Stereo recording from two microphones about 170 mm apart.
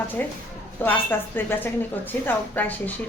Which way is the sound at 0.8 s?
10° left (ahead or behind).